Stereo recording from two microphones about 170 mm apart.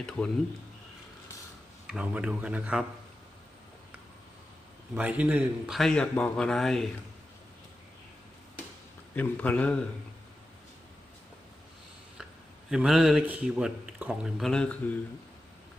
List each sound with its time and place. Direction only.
0.2 s a man's voice: 10° left (ahead or behind)
1.9 s speech: 5° right (ahead or behind)
4.9 s speech: 10° right (ahead or behind)
9.1 s a man's voice: 10° left (ahead or behind)
12.7 s speech: 5° right (ahead or behind)